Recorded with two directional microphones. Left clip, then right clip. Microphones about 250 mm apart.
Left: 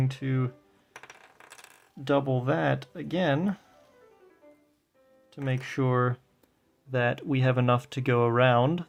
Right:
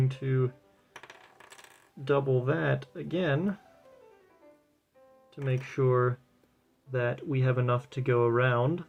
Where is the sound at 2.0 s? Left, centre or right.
Left.